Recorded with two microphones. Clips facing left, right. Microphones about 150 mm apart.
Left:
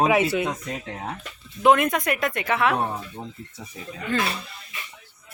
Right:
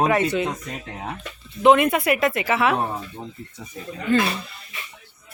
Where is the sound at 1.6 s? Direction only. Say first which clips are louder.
Right 3 dB; centre (ahead or behind).